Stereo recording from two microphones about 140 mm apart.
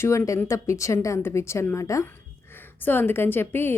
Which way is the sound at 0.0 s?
20° left (ahead or behind).